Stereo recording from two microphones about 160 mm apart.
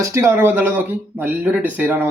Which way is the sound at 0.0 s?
15° right (ahead or behind).